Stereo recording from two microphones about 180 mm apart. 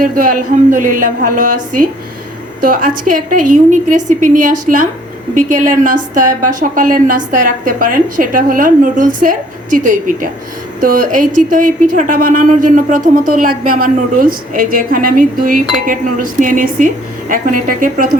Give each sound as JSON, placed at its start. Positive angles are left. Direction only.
{"t": 0.0, "sound": "a woman's voice", "side_deg": -50}